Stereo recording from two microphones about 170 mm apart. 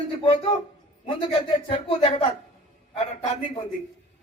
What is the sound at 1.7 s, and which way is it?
Speech, 35° left (ahead or behind).